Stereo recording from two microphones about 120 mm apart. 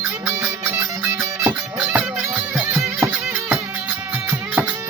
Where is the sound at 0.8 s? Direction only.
15° right (ahead or behind).